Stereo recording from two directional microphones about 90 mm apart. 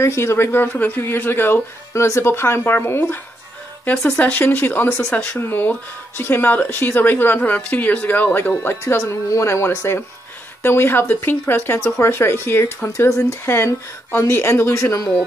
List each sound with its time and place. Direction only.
0.0 s speech: 30° left (ahead or behind)
3.8 s speech: 15° left (ahead or behind); by 15.0 s 35° left (ahead or behind)